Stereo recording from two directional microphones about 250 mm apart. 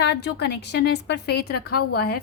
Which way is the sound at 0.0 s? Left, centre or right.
Left.